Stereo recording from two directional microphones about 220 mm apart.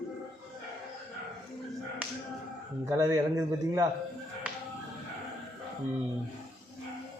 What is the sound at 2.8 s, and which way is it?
Speech, 15° right (ahead or behind).